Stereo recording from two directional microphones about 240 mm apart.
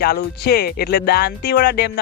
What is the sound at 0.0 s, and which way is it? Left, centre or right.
Speech, left.